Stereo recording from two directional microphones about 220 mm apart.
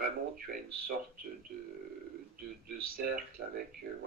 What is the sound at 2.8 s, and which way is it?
Speech, 45° right (ahead or behind).